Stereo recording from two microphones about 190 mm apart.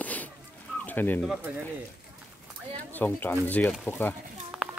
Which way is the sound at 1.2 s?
5° right (ahead or behind).